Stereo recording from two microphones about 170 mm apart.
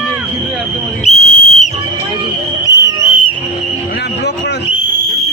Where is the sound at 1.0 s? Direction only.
45° left (ahead or behind).